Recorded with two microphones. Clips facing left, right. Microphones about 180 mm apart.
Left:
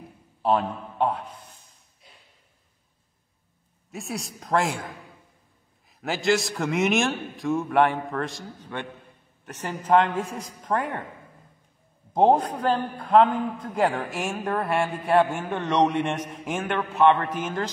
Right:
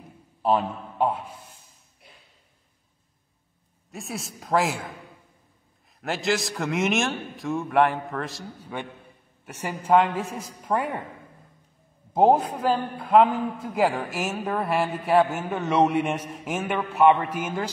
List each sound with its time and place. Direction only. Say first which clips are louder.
0.4 s a man's voice: even; 5° right (ahead or behind)
3.9 s a man's voice: left 1 dB; centre (ahead or behind)
5.9 s a man's voice: left 2 dB; centre (ahead or behind)
12.1 s a man's voice: even; 5° right (ahead or behind)